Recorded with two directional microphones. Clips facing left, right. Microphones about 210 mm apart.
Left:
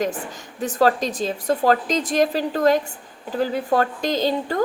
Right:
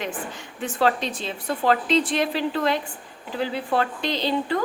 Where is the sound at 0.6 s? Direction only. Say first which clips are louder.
Left 4 dB; 40° left (ahead or behind).